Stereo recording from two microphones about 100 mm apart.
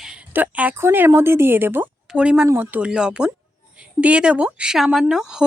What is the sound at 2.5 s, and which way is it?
Speech, 20° right (ahead or behind).